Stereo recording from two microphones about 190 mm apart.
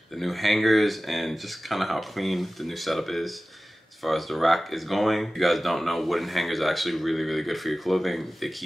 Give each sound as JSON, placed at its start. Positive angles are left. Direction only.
{"t": 0.2, "sound": "speech", "side_deg": 0}